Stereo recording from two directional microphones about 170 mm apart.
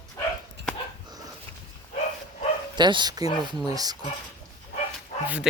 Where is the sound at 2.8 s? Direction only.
25° right (ahead or behind).